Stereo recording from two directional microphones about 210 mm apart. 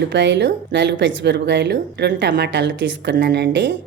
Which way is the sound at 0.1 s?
55° right (ahead or behind).